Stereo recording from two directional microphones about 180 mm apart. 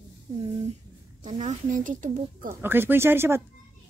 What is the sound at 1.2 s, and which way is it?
Speech, 40° right (ahead or behind).